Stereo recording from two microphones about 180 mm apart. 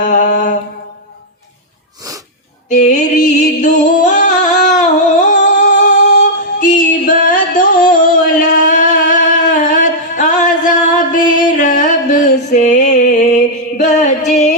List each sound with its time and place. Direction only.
0.0 s mantra: 45° left (ahead or behind)
2.6 s music: 40° left (ahead or behind)
7.0 s a sound: 50° left (ahead or behind)
11.3 s music: 45° left (ahead or behind)